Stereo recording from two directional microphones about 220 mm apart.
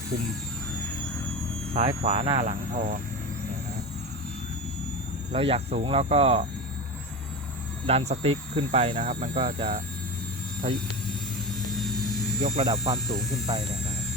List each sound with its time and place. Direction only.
1.7 s speech: 25° right (ahead or behind)
2.5 s speech: 35° right (ahead or behind)
5.3 s speech: 25° right (ahead or behind)
7.9 s speech: 30° right (ahead or behind)
12.4 s speech: 25° right (ahead or behind)